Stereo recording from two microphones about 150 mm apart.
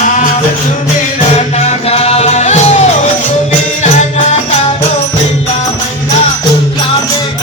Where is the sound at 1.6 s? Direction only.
45° left (ahead or behind).